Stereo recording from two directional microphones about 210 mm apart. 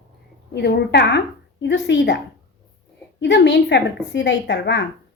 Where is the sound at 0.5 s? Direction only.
50° left (ahead or behind).